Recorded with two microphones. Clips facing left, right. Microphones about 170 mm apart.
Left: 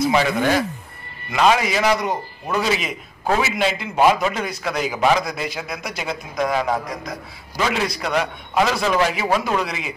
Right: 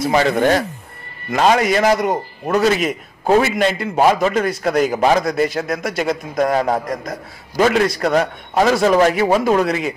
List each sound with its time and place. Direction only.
0.1 s a man's voice: 50° right (ahead or behind)